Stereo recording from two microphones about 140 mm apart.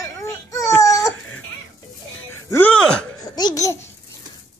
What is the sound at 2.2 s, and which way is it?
Music, 15° left (ahead or behind).